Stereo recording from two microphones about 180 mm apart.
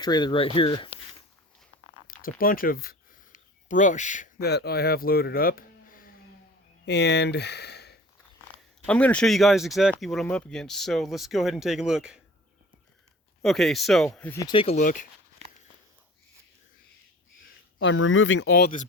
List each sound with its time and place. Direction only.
0.0 s speech: 25° left (ahead or behind)
2.4 s a sound: 50° left (ahead or behind)
4.4 s speech: 65° left (ahead or behind)
6.8 s speech: 70° left (ahead or behind)
8.9 s speech: 5° left (ahead or behind)
13.4 s speech: centre (ahead or behind)
14.3 s speech: 25° left (ahead or behind)
14.8 s speech: 50° left (ahead or behind)
17.7 s speech: 90° left; by 18.8 s 60° left (ahead or behind)